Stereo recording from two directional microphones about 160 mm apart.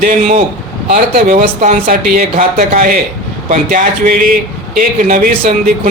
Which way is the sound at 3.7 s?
60° right (ahead or behind).